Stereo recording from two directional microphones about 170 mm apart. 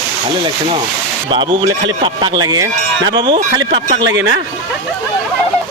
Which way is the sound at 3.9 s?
90° right.